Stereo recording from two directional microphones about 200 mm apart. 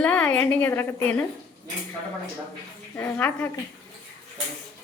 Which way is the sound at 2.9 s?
10° left (ahead or behind).